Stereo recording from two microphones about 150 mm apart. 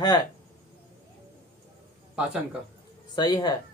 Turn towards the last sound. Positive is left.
turn(degrees=30)  # may be behind; listen again after turning